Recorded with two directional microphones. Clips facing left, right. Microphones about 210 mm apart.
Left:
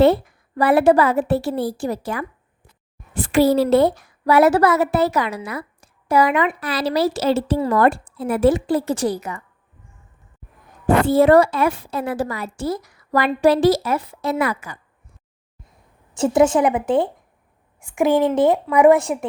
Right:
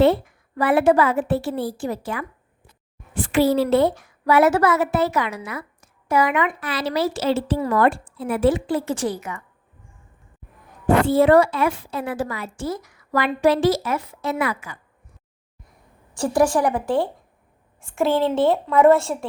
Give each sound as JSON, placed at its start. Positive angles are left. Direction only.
{"t": 0.0, "sound": "a woman's voice", "side_deg": 40}
{"t": 10.8, "sound": "a woman's voice", "side_deg": 40}
{"t": 16.1, "sound": "a woman's voice", "side_deg": 20}